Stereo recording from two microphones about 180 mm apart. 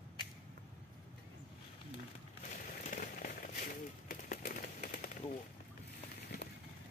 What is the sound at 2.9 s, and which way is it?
Rain on surface, 50° left (ahead or behind).